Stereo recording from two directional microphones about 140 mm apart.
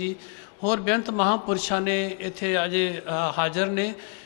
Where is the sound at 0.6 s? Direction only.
20° left (ahead or behind).